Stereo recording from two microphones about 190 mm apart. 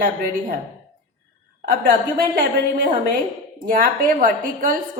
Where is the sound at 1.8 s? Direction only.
50° right (ahead or behind).